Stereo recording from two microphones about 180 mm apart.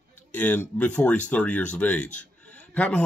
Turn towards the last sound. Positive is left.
turn(degrees=5)  # may be behind; listen again after turning